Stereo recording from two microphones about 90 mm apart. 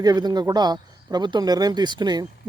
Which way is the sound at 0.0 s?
45° right (ahead or behind).